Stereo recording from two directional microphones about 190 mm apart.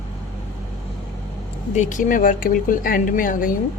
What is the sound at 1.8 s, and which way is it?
Speech, 40° left (ahead or behind).